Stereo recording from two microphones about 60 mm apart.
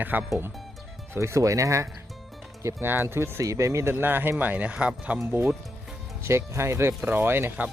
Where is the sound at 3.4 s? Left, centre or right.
Right.